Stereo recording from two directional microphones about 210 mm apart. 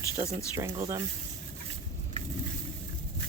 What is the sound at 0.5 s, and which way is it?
Speech, 15° right (ahead or behind).